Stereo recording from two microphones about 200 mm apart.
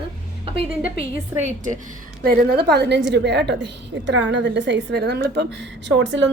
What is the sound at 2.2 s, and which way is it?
A woman's voice, 50° right (ahead or behind).